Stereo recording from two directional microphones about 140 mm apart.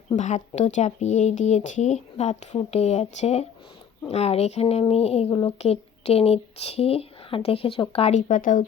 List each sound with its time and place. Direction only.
0.2 s speech: 60° left (ahead or behind); by 8.1 s 45° left (ahead or behind)
8.1 s speech: 70° left (ahead or behind)